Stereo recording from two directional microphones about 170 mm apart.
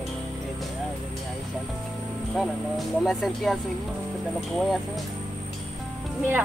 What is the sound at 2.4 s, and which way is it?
Speech, centre (ahead or behind).